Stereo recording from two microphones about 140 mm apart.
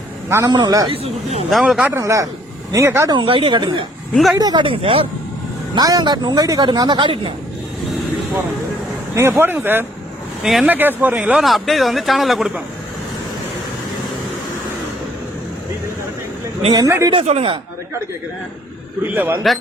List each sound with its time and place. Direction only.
0.3 s speech: 20° right (ahead or behind)
0.9 s speech: 45° right (ahead or behind)
1.5 s speech: centre (ahead or behind)
2.0 s speech: 25° right (ahead or behind)
3.1 s speech: 35° right (ahead or behind)
4.1 s speech: centre (ahead or behind)
4.4 s speech: 30° right (ahead or behind)
5.7 s speech: 30° right (ahead or behind)
9.1 s speech: 15° right (ahead or behind)
10.4 s speech: 5° right (ahead or behind)
16.7 s speech: 25° right (ahead or behind)
17.1 s speech: 45° right (ahead or behind)
19.0 s speech: 15° right (ahead or behind)